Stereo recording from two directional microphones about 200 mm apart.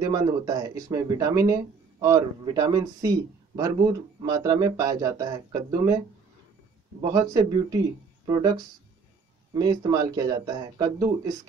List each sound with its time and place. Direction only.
0.0 s speech: 20° right (ahead or behind)
7.0 s speech: 20° right (ahead or behind)